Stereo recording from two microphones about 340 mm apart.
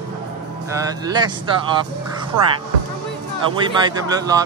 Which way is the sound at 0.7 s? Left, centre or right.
Centre.